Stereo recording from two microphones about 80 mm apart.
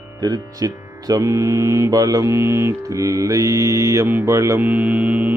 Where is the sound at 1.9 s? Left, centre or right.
Right.